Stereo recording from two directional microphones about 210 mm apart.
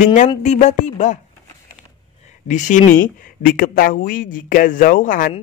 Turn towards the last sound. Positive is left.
turn(degrees=40)  # may be behind; listen again after turning